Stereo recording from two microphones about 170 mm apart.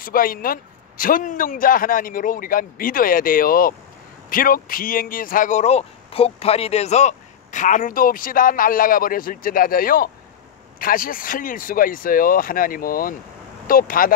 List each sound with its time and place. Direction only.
0.0 s speech: 55° left (ahead or behind)